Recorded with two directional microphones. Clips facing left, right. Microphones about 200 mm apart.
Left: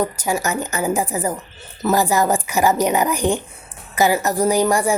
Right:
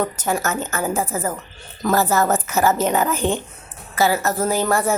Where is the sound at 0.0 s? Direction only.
10° left (ahead or behind).